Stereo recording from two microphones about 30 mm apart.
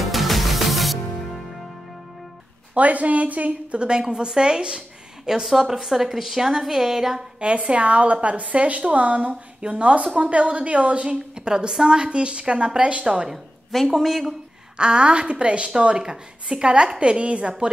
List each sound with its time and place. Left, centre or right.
0.0 s music: centre
2.7 s a woman's voice: right
3.7 s a woman's voice: right
5.2 s a woman's voice: centre
7.5 s a woman's voice: right
9.6 s a woman's voice: right
11.3 s a woman's voice: right
13.0 s a woman's voice: right
13.3 s a woman's voice: centre
14.8 s a woman's voice: right
16.0 s a woman's voice: right